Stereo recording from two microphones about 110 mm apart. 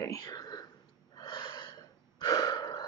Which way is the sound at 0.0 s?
30° left (ahead or behind).